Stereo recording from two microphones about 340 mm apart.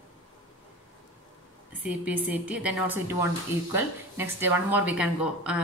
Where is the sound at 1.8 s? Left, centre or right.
Centre.